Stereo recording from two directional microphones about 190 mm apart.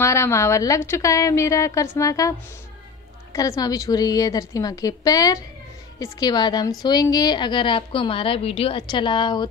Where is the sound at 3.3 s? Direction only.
20° left (ahead or behind).